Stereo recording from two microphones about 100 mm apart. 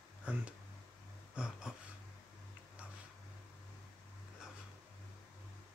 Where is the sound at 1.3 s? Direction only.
10° right (ahead or behind).